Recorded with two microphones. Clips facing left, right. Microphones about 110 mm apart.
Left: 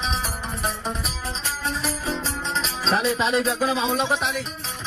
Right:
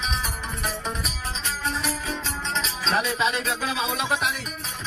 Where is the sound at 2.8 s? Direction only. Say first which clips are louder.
Left 2 dB; 35° left (ahead or behind).